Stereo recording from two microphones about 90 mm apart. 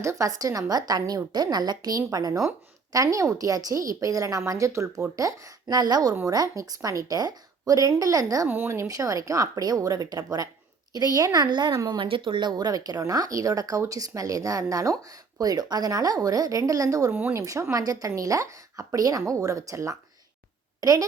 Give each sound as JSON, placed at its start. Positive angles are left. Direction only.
{"t": 0.0, "sound": "a woman's voice", "side_deg": -35}
{"t": 8.4, "sound": "speech", "side_deg": -25}
{"t": 11.9, "sound": "speech", "side_deg": -70}
{"t": 17.1, "sound": "speech", "side_deg": -20}
{"t": 17.3, "sound": "a woman's voice", "side_deg": -35}